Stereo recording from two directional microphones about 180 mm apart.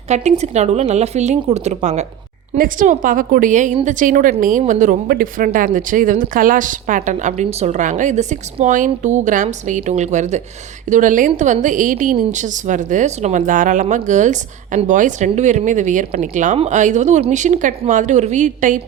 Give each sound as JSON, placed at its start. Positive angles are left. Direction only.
{"t": 0.1, "sound": "speech", "side_deg": -40}
{"t": 2.6, "sound": "a woman's voice", "side_deg": -50}